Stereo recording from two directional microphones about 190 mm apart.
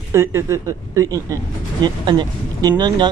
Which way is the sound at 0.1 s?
15° right (ahead or behind).